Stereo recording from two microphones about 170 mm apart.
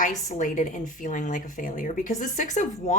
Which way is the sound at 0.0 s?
45° left (ahead or behind).